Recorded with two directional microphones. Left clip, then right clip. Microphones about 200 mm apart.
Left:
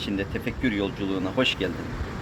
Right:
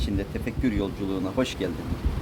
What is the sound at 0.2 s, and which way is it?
Speech, 5° left (ahead or behind).